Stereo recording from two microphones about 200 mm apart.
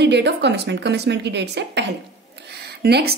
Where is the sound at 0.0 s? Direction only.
60° right (ahead or behind).